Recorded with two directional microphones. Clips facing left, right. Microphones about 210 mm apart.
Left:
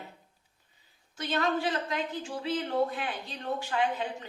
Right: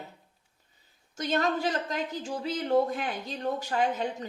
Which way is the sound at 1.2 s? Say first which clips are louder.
Right 2 dB; 45° right (ahead or behind).